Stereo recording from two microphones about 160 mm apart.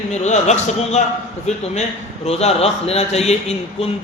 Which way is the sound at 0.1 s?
45° left (ahead or behind).